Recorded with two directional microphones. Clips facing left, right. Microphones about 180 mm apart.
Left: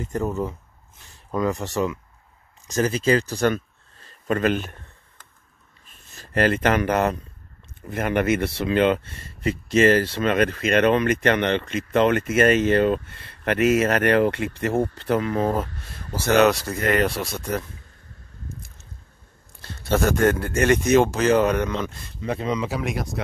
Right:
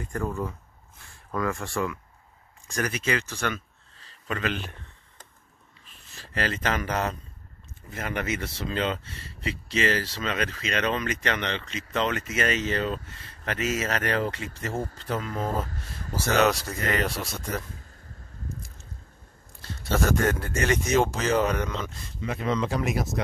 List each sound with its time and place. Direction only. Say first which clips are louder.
0.0 s speech: left 5 dB; 20° left (ahead or behind)
3.5 s a sound: left 8 dB; 50° left (ahead or behind)
5.9 s speech: left 2 dB; 50° left (ahead or behind)
20.1 s speech: left 6 dB; 60° left (ahead or behind)
22.2 s speech: left 4 dB; 30° left (ahead or behind)
22.5 s speech: right 2 dB; 5° left (ahead or behind)